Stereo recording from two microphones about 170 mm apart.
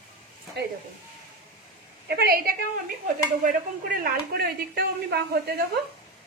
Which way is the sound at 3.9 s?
60° right (ahead or behind).